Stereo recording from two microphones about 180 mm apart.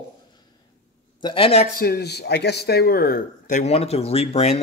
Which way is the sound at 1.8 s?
60° left (ahead or behind).